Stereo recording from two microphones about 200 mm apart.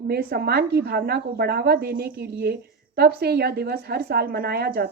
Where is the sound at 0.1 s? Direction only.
50° right (ahead or behind).